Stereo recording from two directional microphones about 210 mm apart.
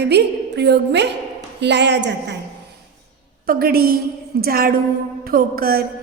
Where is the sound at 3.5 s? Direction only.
45° right (ahead or behind).